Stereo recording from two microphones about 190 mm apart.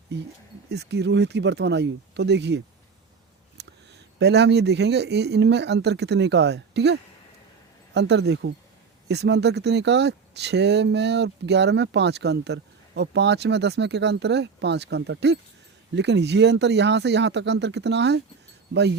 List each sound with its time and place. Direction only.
0.1 s speech: 60° right (ahead or behind)
3.6 s a sound: 60° right (ahead or behind)
4.2 s speech: 60° right (ahead or behind)